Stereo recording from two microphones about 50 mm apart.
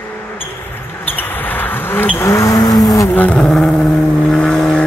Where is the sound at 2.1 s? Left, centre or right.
Left.